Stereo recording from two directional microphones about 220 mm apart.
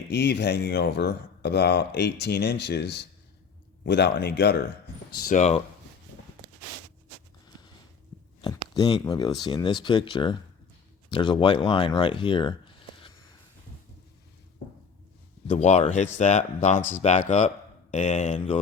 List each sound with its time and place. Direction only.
0.1 s speech: 50° left (ahead or behind)
5.1 s speech: 35° left (ahead or behind)
8.7 s speech: 15° left (ahead or behind)
15.4 s speech: 30° left (ahead or behind)